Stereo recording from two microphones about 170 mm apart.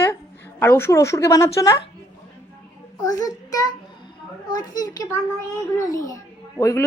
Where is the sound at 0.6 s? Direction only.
15° left (ahead or behind).